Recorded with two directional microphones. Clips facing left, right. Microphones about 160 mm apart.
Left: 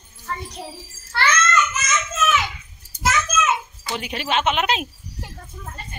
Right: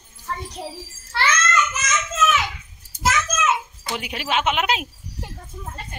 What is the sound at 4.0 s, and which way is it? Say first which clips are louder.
Speech: left 1 dB; 5° right (ahead or behind).